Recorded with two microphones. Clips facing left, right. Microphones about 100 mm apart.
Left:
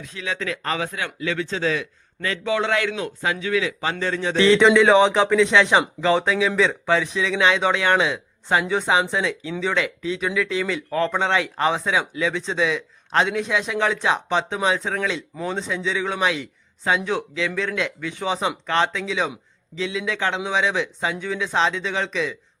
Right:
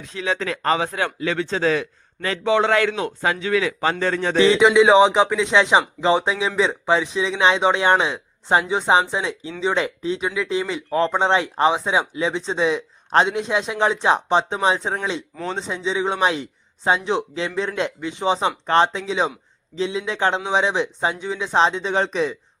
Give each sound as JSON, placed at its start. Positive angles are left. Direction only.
{"t": 0.0, "sound": "a man's voice", "side_deg": -30}
{"t": 4.4, "sound": "speech", "side_deg": -15}
{"t": 10.2, "sound": "a man's voice", "side_deg": -20}